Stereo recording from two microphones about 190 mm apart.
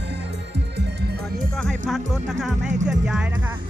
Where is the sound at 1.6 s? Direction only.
Centre (ahead or behind).